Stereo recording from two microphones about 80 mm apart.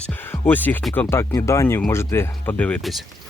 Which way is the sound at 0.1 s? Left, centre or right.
Left.